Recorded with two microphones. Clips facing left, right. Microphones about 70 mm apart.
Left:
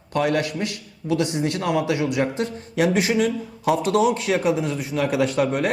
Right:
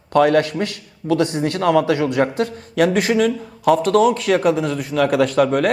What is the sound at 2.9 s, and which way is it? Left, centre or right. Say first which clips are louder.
A man's voice: right 3 dB; right.